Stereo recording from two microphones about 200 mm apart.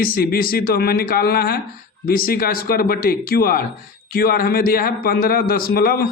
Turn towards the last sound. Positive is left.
turn(degrees=50)  # may be behind; listen again after turning